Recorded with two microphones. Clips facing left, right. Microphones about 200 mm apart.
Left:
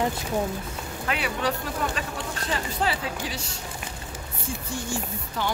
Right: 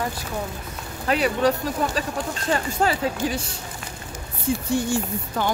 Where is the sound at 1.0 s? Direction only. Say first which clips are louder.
Right 8 dB; 40° right (ahead or behind).